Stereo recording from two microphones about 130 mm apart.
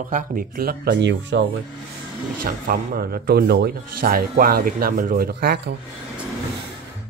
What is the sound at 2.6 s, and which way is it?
Speech, 90° right.